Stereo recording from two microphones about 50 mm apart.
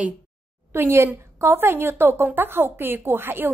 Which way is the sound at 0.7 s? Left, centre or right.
Right.